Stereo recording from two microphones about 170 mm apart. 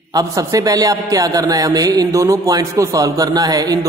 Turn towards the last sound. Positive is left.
turn(degrees=-20)  # may be behind; listen again after turning